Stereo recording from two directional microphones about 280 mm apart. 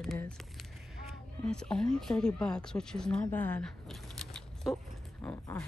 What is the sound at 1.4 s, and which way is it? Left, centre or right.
Speech, centre.